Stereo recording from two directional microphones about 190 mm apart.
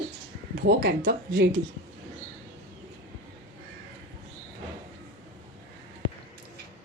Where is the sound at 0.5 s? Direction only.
55° right (ahead or behind).